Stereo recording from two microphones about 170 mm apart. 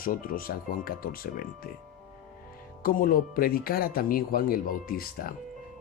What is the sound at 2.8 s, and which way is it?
Speech, 55° left (ahead or behind).